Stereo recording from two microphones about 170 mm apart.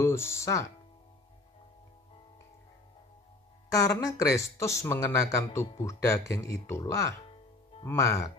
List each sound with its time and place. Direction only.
0.0 s speech: 15° left (ahead or behind)
3.7 s speech: 20° left (ahead or behind)